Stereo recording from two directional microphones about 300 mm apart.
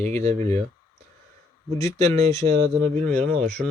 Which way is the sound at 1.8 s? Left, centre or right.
Centre.